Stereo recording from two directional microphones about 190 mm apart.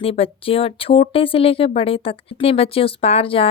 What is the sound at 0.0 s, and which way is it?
Speech, 30° left (ahead or behind).